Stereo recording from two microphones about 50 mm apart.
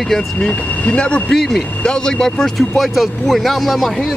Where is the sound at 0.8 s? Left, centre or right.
Left.